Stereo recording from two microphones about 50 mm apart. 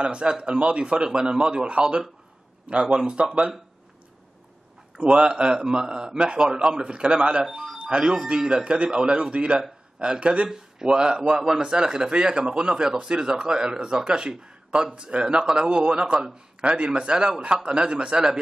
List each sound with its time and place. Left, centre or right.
0.0 s a man's voice: right
4.9 s a man's voice: right